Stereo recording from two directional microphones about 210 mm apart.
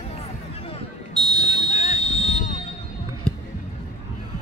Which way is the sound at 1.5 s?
35° left (ahead or behind).